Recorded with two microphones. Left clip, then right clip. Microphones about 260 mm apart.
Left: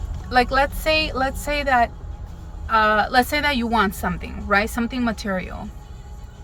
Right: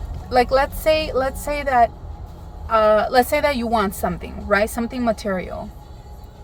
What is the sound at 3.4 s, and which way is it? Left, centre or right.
Speech, left.